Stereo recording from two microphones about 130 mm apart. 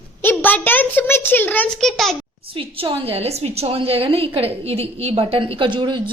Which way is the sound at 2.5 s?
45° right (ahead or behind).